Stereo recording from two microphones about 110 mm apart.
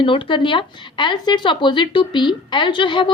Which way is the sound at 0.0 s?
50° left (ahead or behind).